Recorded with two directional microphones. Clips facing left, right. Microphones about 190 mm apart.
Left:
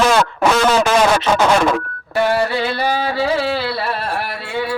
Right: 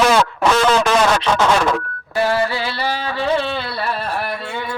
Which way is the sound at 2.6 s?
50° left (ahead or behind).